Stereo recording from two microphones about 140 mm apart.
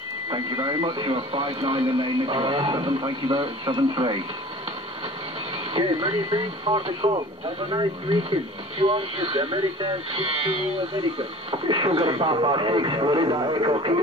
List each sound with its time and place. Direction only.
0.3 s speech: 35° right (ahead or behind)
5.7 s speech: 40° right (ahead or behind)
11.5 s speech: 35° right (ahead or behind)